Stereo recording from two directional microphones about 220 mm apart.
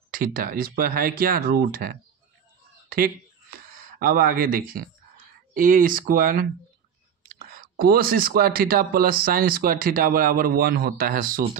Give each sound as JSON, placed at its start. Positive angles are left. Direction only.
{"t": 0.1, "sound": "speech", "side_deg": -40}
{"t": 2.9, "sound": "a sound", "side_deg": -40}
{"t": 4.0, "sound": "speech", "side_deg": -40}